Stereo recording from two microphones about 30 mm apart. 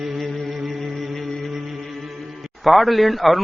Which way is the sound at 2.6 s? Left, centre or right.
Centre.